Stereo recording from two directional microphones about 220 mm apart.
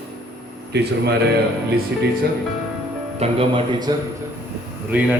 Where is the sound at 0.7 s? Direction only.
50° right (ahead or behind).